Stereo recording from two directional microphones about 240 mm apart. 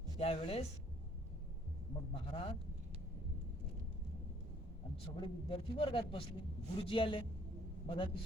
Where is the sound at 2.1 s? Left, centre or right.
Left.